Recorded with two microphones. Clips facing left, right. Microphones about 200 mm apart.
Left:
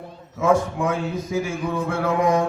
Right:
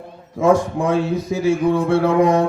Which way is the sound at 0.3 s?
30° right (ahead or behind).